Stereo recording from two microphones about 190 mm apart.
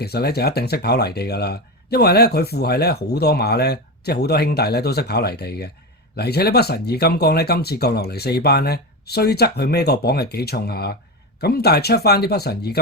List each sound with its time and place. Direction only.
0.0 s speech: 55° left (ahead or behind)